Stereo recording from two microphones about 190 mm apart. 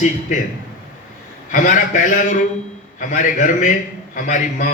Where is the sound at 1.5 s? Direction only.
40° left (ahead or behind).